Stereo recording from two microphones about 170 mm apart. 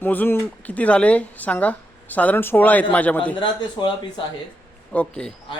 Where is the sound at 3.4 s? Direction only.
30° left (ahead or behind).